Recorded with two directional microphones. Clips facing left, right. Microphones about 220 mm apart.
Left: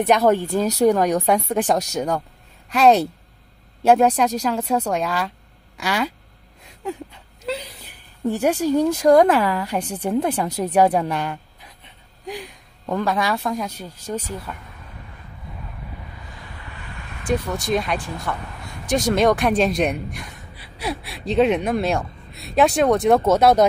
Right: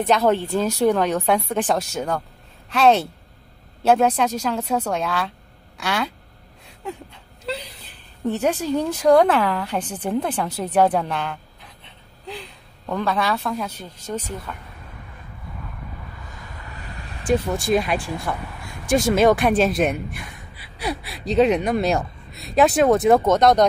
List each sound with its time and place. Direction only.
0.0 s a woman's voice: 10° left (ahead or behind)
7.4 s a woman's voice: 10° left (ahead or behind)
12.8 s a woman's voice: 15° left (ahead or behind)
16.3 s vehicle: 40° right (ahead or behind)
17.6 s a woman's voice: 5° right (ahead or behind)